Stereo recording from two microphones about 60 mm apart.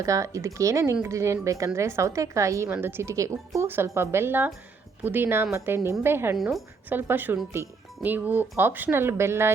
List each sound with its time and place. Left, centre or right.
0.0 s a woman's voice: right
2.6 s speech: right
3.8 s speech: right
6.3 s a woman's voice: centre
6.9 s speech: right
7.6 s speech: right
8.0 s speech: right